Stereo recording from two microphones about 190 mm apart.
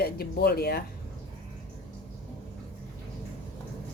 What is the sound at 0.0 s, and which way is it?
Speech, 55° left (ahead or behind).